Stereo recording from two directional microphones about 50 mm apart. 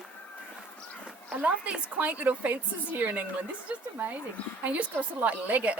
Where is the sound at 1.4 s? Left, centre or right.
Right.